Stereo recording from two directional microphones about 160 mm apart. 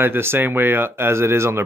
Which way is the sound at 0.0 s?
15° right (ahead or behind).